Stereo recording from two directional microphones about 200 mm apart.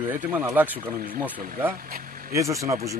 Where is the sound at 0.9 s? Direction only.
45° right (ahead or behind).